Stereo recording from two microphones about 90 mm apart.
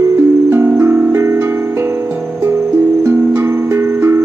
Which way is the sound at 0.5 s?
25° right (ahead or behind).